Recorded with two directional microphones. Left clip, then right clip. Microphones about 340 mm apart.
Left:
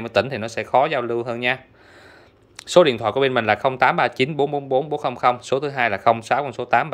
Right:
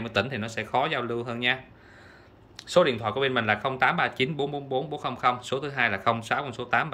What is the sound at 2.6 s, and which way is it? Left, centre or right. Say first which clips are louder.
Speech: left 7 dB; left.